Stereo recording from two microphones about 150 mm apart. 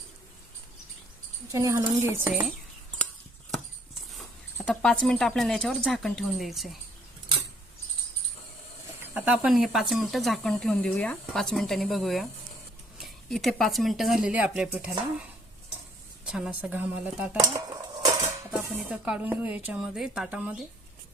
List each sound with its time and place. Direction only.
1.5 s speech: 20° right (ahead or behind)
4.5 s speech: 5° left (ahead or behind)
9.0 s speech: 10° right (ahead or behind)
16.2 s speech: 5° right (ahead or behind)
17.4 s cutlery: 25° right (ahead or behind)
18.5 s speech: 5° right (ahead or behind)